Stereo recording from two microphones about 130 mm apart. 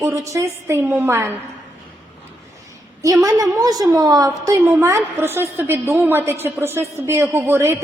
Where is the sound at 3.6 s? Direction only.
30° right (ahead or behind).